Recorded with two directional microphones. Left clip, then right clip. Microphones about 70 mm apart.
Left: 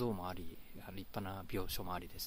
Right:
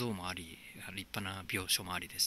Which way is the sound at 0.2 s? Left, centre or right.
Left.